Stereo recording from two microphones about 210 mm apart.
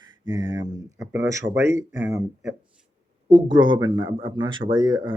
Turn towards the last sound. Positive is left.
turn(degrees=-20)  # may be behind; listen again after turning